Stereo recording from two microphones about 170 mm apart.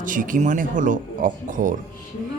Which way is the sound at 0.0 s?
50° right (ahead or behind).